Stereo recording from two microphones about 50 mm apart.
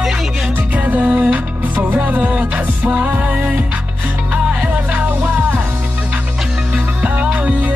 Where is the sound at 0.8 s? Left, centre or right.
Right.